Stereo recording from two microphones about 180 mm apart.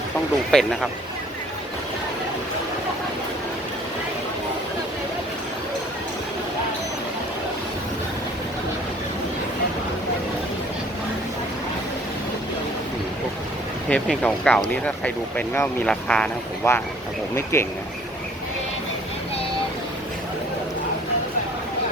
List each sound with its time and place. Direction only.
0.5 s speech: centre (ahead or behind)
13.9 s speech: 5° left (ahead or behind)